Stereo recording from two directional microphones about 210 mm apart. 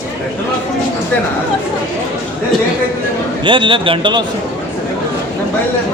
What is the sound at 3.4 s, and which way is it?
Speech, 25° right (ahead or behind).